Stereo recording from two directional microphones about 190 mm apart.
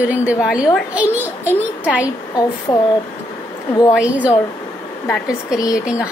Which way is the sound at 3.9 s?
5° right (ahead or behind).